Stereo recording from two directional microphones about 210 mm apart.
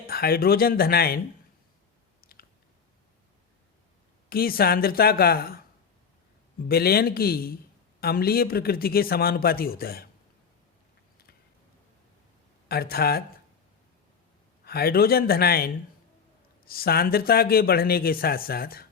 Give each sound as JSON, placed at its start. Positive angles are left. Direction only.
{"t": 0.1, "sound": "speech", "side_deg": 45}
{"t": 2.2, "sound": "chewing", "side_deg": 45}
{"t": 4.3, "sound": "speech", "side_deg": 45}
{"t": 6.7, "sound": "speech", "side_deg": 45}
{"t": 12.6, "sound": "speech", "side_deg": 45}
{"t": 14.6, "sound": "speech", "side_deg": 50}